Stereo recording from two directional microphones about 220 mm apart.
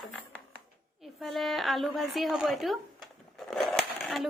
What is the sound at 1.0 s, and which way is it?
A woman's voice, centre (ahead or behind).